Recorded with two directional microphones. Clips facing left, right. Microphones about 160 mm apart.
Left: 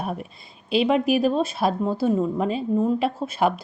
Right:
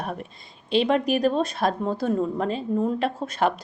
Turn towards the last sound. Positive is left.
turn(degrees=10)  # may be behind; listen again after turning